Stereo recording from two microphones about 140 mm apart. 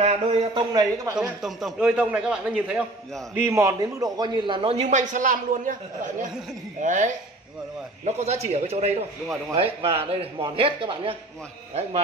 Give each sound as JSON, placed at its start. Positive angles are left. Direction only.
{"t": 0.0, "sound": "a sound", "side_deg": -45}
{"t": 0.6, "sound": "speech", "side_deg": -30}
{"t": 1.1, "sound": "a man's voice", "side_deg": -5}
{"t": 3.3, "sound": "a man's voice", "side_deg": -20}
{"t": 8.0, "sound": "a man's voice", "side_deg": -50}